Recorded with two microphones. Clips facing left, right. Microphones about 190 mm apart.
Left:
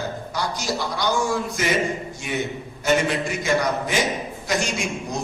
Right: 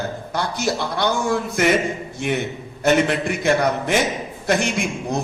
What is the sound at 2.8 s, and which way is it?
A man's voice, 60° right (ahead or behind).